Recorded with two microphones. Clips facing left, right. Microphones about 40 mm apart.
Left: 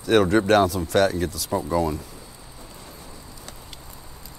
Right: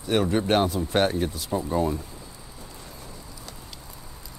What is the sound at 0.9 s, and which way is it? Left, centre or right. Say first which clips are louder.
Speech: left 3 dB; left.